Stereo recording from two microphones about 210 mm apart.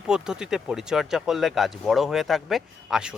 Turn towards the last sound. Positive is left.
turn(degrees=-5)  # may be behind; listen again after turning